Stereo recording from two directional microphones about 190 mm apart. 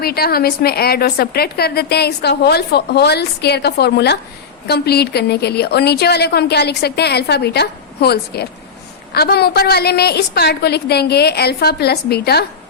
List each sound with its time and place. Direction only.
0.0 s a woman's voice: 55° left (ahead or behind)